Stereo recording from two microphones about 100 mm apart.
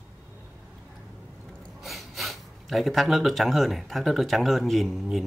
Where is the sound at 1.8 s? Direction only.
Centre (ahead or behind).